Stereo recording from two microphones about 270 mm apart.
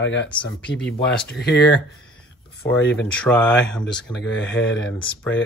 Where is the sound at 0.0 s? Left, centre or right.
Left.